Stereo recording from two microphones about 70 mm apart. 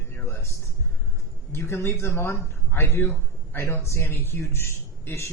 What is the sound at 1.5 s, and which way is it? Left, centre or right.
A man's voice, left.